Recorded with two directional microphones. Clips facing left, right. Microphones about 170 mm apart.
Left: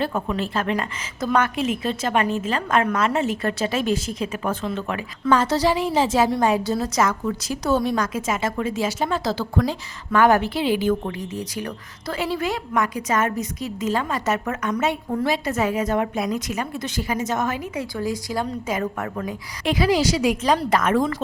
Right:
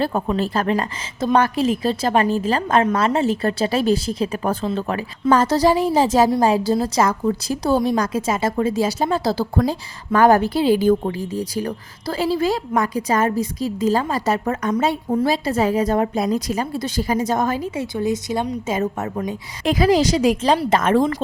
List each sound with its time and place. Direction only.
0.0 s a woman's voice: 35° right (ahead or behind)
19.6 s a woman's voice: 40° right (ahead or behind)